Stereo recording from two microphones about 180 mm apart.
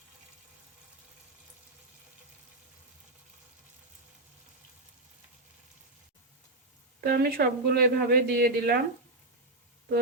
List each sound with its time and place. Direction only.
7.0 s speech: 55° right (ahead or behind)